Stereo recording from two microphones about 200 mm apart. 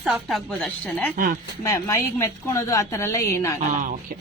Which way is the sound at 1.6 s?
15° left (ahead or behind).